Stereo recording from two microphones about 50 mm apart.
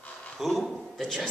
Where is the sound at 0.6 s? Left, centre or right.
Centre.